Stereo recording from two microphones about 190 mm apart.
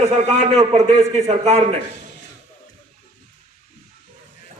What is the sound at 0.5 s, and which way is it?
A man's voice, 35° right (ahead or behind).